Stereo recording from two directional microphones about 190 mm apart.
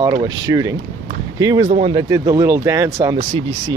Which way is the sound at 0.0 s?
20° right (ahead or behind).